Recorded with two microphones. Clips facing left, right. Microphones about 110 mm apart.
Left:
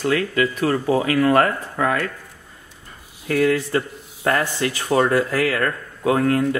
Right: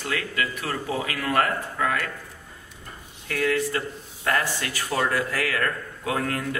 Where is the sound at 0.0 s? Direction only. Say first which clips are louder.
Left 9 dB; 30° left (ahead or behind).